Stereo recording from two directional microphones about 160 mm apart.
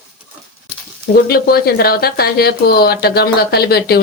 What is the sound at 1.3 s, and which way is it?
Speech, 75° left (ahead or behind).